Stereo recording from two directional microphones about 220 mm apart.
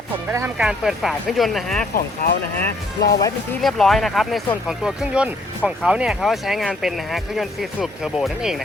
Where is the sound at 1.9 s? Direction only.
40° left (ahead or behind).